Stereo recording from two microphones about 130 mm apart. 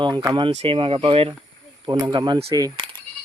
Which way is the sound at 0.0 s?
30° right (ahead or behind).